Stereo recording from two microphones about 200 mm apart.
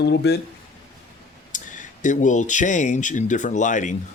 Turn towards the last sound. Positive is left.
turn(degrees=40)  # may be behind; listen again after turning